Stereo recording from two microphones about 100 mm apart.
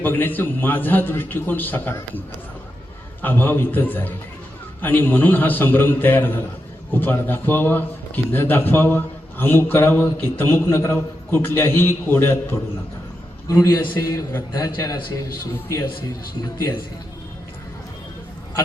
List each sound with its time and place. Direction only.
0.0 s a man's voice: 20° left (ahead or behind)